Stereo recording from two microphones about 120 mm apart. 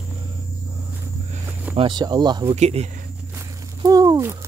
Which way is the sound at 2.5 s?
60° right (ahead or behind).